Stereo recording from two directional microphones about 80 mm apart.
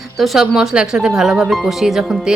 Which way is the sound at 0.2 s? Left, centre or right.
Centre.